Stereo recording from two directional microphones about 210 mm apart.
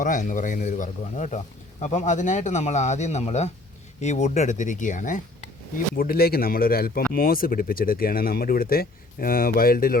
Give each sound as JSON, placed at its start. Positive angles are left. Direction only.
{"t": 0.0, "sound": "speech", "side_deg": 40}